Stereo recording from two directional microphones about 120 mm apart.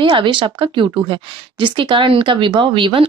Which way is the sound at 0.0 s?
45° right (ahead or behind).